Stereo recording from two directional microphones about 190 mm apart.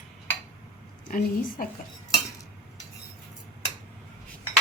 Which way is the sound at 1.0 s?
45° left (ahead or behind).